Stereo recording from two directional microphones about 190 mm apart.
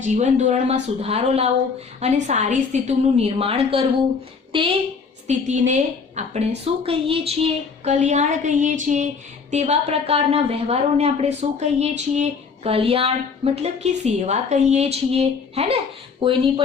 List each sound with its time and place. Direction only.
0.0 s a woman's voice: 40° right (ahead or behind)
5.5 s a woman's voice: 40° right (ahead or behind)